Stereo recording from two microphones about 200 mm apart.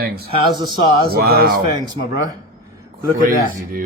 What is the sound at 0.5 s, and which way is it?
Speech, 20° right (ahead or behind).